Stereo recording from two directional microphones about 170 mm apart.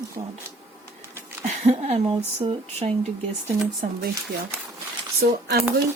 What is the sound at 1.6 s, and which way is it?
Speech, 40° right (ahead or behind).